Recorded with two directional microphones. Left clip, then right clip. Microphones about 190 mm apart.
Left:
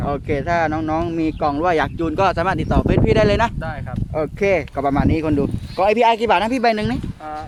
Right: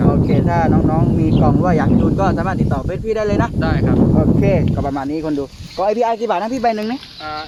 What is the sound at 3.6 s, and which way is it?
Speech, 5° left (ahead or behind).